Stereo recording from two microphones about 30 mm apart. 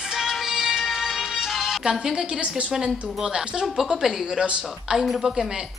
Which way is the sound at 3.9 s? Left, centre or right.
Centre.